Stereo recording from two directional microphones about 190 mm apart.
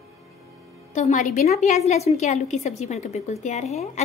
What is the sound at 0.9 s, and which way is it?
A woman's voice, 40° left (ahead or behind).